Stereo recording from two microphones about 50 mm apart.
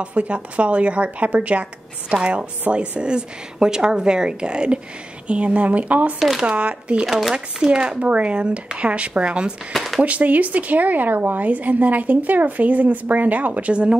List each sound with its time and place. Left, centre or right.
0.0 s a woman's voice: right
6.1 s speech: centre
6.4 s speech: right
7.1 s speech: centre
7.3 s speech: centre
9.8 s a sound: centre
10.0 s a woman's voice: right